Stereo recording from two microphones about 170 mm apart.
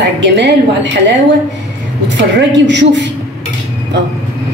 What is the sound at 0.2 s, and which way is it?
Speech, 90° right.